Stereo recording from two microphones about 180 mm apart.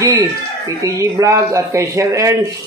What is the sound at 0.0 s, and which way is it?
Speech, 20° right (ahead or behind).